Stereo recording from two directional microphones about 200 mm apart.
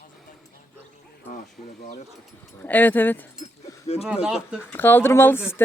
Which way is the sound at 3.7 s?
15° left (ahead or behind).